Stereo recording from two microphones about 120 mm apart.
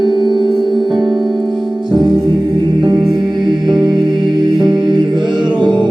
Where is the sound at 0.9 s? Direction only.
5° right (ahead or behind).